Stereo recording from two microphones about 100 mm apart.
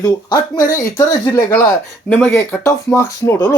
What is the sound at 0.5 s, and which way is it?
Speech, 40° left (ahead or behind).